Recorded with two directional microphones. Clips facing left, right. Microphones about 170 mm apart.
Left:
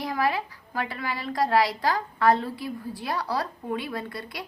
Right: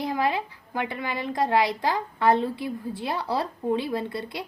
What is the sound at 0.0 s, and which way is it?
A woman's voice, 25° right (ahead or behind).